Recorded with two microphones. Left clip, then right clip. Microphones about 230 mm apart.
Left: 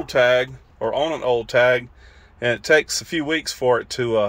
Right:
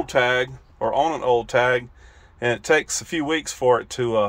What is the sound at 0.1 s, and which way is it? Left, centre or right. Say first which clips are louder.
Speech: left 4 dB; centre.